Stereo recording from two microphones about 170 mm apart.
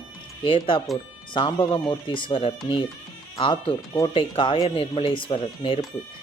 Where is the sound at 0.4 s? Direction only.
30° left (ahead or behind).